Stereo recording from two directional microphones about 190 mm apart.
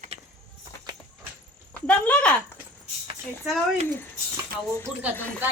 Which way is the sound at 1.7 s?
5° left (ahead or behind).